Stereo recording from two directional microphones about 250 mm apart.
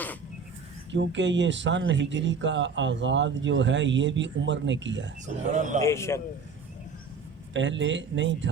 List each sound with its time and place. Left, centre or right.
0.9 s speech: right
5.2 s speech: right
5.8 s speech: centre
7.5 s speech: right